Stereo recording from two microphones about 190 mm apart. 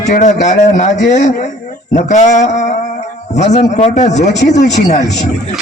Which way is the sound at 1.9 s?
40° left (ahead or behind).